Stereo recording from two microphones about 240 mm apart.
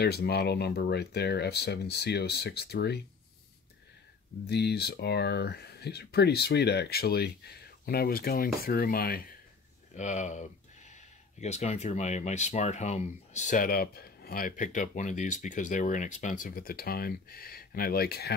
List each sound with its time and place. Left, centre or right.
0.0 s speech: left
4.5 s speech: left